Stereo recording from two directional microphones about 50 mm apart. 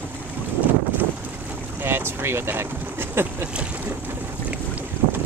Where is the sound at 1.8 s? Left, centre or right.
Right.